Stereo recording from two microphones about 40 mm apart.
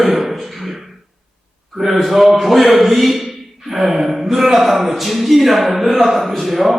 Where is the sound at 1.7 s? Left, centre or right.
Centre.